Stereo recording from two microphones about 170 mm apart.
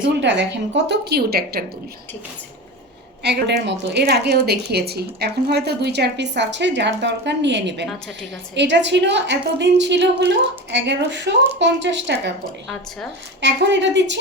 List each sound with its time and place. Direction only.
0.2 s a woman's voice: 90° right; by 1.6 s 65° right (ahead or behind)
3.2 s a woman's voice: 90° right
12.6 s speech: centre (ahead or behind)
13.4 s a woman's voice: 90° right